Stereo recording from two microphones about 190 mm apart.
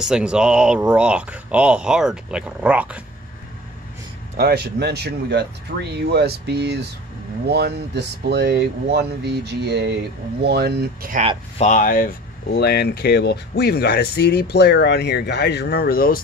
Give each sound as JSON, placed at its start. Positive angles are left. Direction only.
{"t": 0.0, "sound": "speech", "side_deg": -5}
{"t": 4.4, "sound": "speech", "side_deg": -55}
{"t": 11.5, "sound": "speech", "side_deg": 40}